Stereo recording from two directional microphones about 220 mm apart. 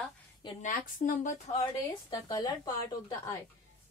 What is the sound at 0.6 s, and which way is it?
Speech, 35° left (ahead or behind).